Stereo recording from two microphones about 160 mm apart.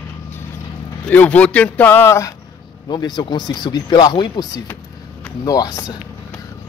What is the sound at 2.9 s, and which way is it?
Speech, 25° left (ahead or behind).